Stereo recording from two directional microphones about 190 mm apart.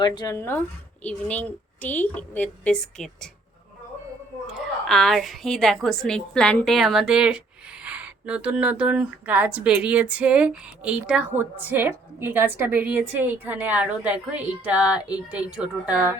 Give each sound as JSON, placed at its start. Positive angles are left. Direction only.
{"t": 0.0, "sound": "a woman's voice", "side_deg": 20}
{"t": 4.4, "sound": "a woman's voice", "side_deg": 0}